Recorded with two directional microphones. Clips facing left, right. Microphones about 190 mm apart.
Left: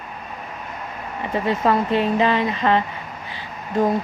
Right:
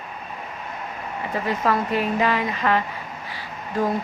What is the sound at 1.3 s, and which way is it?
Speech, 25° left (ahead or behind).